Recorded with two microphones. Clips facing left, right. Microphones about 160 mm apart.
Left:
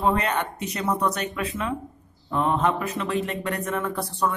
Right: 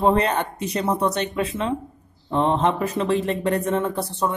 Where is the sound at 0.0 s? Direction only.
30° right (ahead or behind).